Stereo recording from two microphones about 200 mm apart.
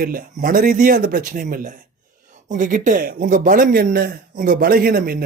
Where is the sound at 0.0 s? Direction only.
45° right (ahead or behind).